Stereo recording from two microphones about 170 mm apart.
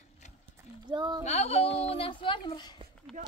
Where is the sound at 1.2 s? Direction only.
40° left (ahead or behind).